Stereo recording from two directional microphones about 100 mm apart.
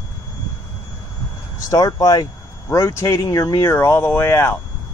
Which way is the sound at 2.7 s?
30° left (ahead or behind).